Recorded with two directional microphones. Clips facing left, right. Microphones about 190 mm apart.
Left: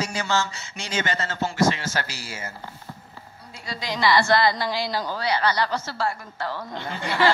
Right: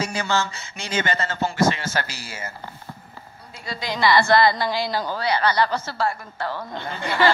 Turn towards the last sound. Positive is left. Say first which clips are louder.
# right 1 dB
turn(degrees=-55)  # may be behind; listen again after turning